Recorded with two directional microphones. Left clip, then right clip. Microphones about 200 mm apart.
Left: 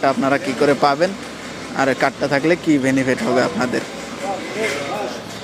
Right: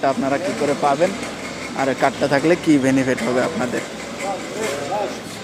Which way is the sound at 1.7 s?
10° left (ahead or behind).